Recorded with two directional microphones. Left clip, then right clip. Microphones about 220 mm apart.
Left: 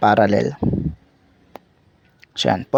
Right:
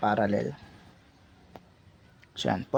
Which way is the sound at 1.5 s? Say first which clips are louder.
Left 10 dB; 35° left (ahead or behind).